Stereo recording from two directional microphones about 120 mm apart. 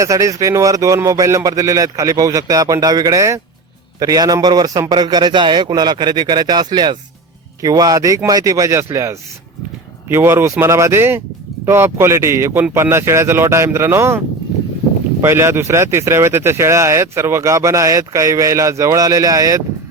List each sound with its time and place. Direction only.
0.0 s a man's voice: 25° right (ahead or behind)
15.2 s speech: 20° right (ahead or behind)